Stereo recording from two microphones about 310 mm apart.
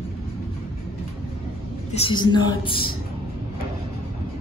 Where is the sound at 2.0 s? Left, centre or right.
Centre.